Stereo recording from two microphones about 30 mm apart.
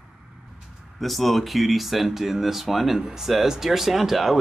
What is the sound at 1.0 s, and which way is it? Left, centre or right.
Speech, centre.